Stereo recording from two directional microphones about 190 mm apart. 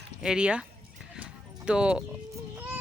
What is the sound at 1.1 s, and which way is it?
Clip-clop, 5° right (ahead or behind).